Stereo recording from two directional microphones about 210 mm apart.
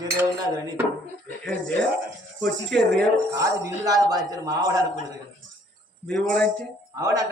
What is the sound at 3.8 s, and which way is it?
Speech, 20° right (ahead or behind).